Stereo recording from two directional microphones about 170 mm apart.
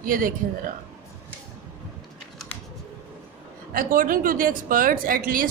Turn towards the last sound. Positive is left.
turn(degrees=-55)  # may be behind; listen again after turning